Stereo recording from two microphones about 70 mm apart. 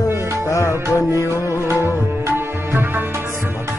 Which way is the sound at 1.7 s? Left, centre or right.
Right.